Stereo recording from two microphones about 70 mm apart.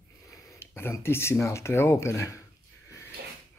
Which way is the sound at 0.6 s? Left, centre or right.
Left.